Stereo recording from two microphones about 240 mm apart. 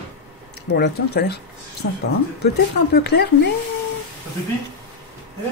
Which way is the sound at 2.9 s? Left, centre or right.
Left.